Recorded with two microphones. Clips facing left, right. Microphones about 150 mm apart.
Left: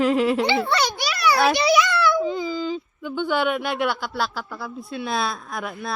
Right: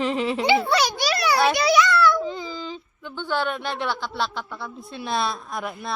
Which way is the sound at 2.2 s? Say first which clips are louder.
Left 6 dB; centre (ahead or behind).